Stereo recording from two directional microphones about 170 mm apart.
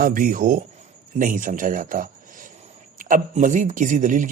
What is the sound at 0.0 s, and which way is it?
A man's voice, 55° right (ahead or behind).